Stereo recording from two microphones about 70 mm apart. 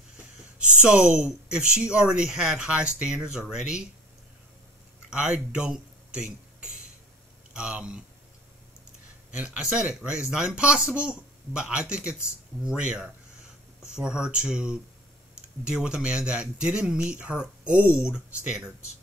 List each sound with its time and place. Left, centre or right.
0.8 s speech: centre
5.1 s speech: centre
7.5 s speech: centre
9.6 s speech: centre